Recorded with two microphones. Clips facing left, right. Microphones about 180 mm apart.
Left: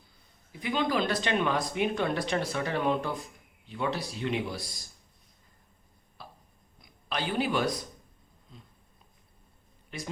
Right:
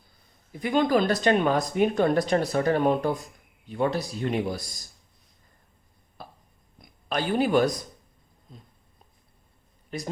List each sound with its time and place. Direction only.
0.6 s speech: 50° right (ahead or behind)
6.2 s a sound: 50° right (ahead or behind)
7.1 s speech: 45° right (ahead or behind)
9.9 s speech: 45° right (ahead or behind)